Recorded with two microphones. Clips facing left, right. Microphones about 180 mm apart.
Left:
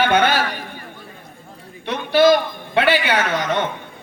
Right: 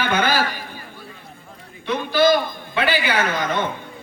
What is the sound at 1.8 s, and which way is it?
A man's voice, 65° left (ahead or behind).